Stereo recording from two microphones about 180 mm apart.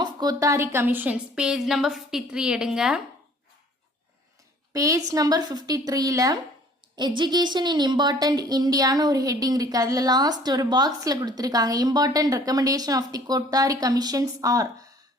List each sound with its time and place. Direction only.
0.0 s a woman's voice: 20° right (ahead or behind); by 3.0 s 5° right (ahead or behind)
4.7 s a woman's voice: 20° right (ahead or behind)